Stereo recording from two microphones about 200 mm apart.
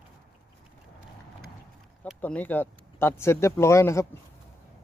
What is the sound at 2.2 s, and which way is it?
Speech, 10° left (ahead or behind).